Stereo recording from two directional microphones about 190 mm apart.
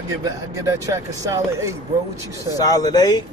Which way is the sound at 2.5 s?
20° left (ahead or behind).